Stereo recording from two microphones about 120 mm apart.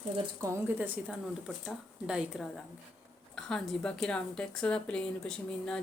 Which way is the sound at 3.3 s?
5° left (ahead or behind).